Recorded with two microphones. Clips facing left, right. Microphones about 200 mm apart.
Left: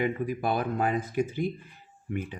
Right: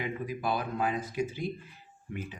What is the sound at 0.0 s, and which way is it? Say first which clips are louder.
Speech: left 5 dB; 55° left (ahead or behind).